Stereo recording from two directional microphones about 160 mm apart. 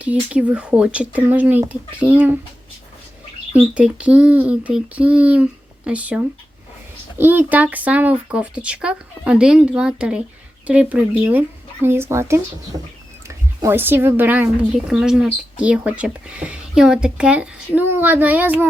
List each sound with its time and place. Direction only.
0.0 s speech: 10° right (ahead or behind)
3.5 s speech: 10° right (ahead or behind)
12.7 s bird: 25° right (ahead or behind)
13.2 s speech: 15° right (ahead or behind)